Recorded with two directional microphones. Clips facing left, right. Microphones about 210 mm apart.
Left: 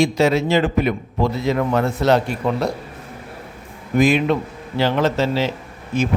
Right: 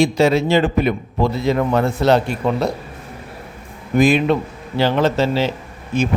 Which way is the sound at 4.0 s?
35° right (ahead or behind).